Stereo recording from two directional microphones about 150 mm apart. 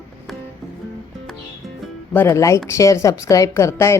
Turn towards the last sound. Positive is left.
turn(degrees=20)  # may be behind; listen again after turning